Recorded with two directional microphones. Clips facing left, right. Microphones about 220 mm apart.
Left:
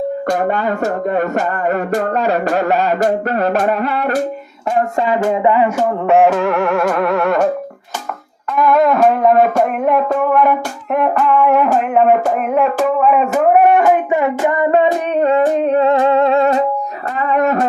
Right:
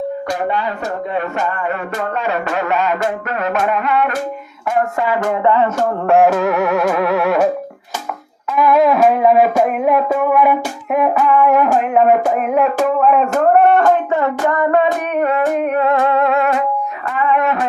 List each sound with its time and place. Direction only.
0.3 s speech: 45° left (ahead or behind)
4.7 s music: 25° left (ahead or behind); by 7.5 s 5° right (ahead or behind)
8.5 s music: 5° right (ahead or behind); by 16.6 s 30° left (ahead or behind)
17.2 s a sound: 40° left (ahead or behind)